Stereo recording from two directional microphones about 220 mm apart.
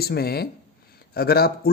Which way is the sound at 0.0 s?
45° left (ahead or behind).